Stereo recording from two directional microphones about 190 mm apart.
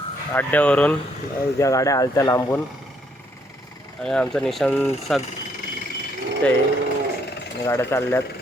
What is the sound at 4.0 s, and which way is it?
Speech, 5° left (ahead or behind).